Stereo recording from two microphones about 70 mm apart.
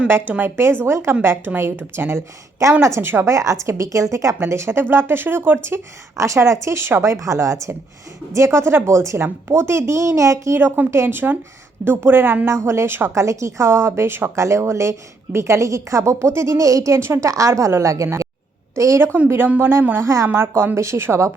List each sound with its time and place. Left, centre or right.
0.1 s speech: right
3.3 s a woman's voice: right
4.4 s a woman's voice: right
10.9 s speech: right
12.5 s speech: right
13.2 s speech: right
14.4 s a woman's voice: right
19.5 s speech: right